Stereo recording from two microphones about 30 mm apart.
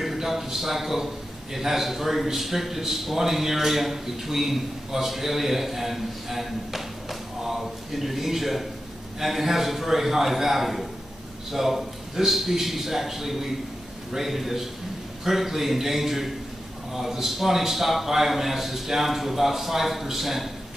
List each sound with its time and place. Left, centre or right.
0.0 s a man's voice: centre